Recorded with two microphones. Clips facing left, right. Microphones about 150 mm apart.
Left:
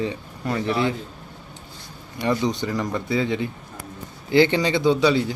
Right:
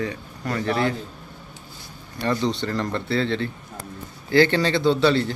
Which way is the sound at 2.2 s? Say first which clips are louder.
Left 1 dB; 15° left (ahead or behind).